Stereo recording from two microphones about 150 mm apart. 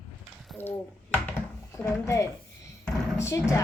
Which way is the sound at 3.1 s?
20° left (ahead or behind).